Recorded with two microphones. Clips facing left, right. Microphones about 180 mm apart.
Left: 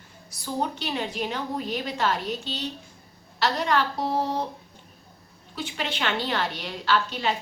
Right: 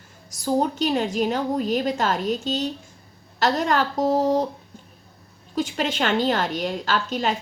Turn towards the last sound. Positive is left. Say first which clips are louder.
# right 1 dB
turn(degrees=-45)  # may be behind; listen again after turning